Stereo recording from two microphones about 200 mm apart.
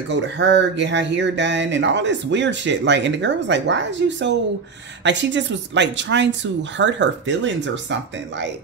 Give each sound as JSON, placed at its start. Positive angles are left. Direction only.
{"t": 0.1, "sound": "speech", "side_deg": -60}